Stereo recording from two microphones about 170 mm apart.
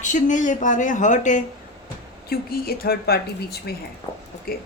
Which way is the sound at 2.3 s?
65° left (ahead or behind).